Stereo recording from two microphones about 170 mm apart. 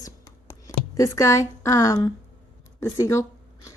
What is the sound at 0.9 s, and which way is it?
A woman's voice, 20° left (ahead or behind).